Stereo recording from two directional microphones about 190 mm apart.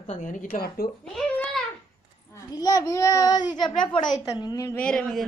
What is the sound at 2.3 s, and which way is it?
A child's voice, 20° left (ahead or behind).